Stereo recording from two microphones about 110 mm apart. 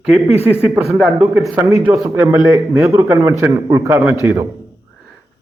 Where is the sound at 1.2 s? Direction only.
30° right (ahead or behind).